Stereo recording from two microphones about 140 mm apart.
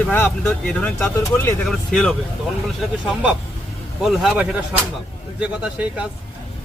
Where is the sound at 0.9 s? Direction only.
20° left (ahead or behind).